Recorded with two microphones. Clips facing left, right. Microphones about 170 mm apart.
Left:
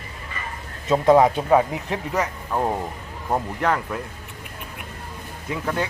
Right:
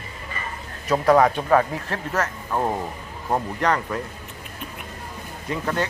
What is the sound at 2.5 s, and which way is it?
Speech, 5° left (ahead or behind).